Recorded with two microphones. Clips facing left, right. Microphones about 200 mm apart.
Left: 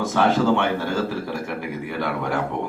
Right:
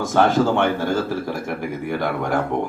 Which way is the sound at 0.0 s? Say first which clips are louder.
Right 2 dB; 45° right (ahead or behind).